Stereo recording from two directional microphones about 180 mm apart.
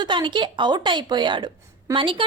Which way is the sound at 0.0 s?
25° right (ahead or behind).